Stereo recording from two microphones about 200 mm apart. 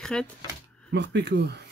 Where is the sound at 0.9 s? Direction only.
60° right (ahead or behind).